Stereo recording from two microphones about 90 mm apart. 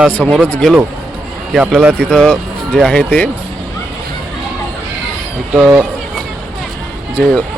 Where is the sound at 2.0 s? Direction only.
10° left (ahead or behind).